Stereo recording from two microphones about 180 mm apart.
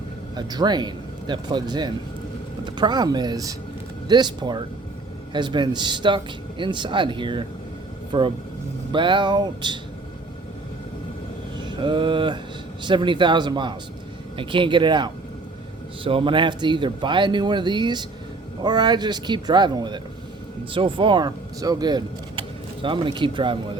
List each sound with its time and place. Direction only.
0.3 s speech: 25° right (ahead or behind)
11.8 s speech: 25° right (ahead or behind)